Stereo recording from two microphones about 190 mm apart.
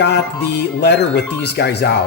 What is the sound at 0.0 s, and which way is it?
Speech, 60° left (ahead or behind).